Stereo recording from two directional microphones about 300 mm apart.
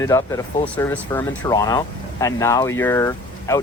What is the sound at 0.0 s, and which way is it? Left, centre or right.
Speech, centre.